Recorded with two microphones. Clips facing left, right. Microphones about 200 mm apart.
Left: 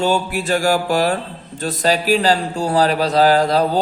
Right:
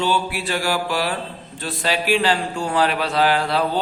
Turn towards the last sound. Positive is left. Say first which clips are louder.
# left 5 dB
turn(degrees=40)  # may be behind; listen again after turning